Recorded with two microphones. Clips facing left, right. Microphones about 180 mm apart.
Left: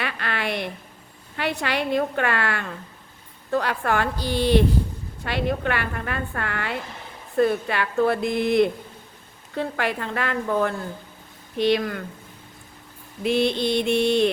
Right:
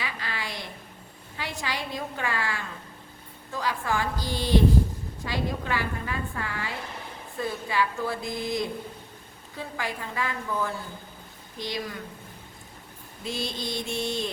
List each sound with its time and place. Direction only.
0.0 s a sound: 65° left (ahead or behind)
1.4 s a woman's voice: 65° left (ahead or behind)
13.2 s a woman's voice: 65° left (ahead or behind)